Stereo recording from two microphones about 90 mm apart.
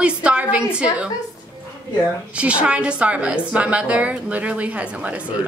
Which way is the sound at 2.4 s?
15° right (ahead or behind).